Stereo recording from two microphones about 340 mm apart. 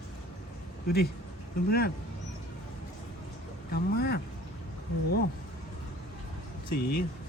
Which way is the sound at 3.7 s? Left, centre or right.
Left.